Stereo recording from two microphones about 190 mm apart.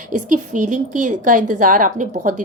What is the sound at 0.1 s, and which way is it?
A woman's voice, 40° right (ahead or behind).